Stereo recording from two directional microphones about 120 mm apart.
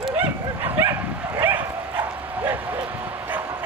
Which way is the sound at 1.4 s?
15° right (ahead or behind).